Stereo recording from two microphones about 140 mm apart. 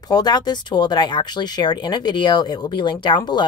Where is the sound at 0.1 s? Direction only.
30° left (ahead or behind).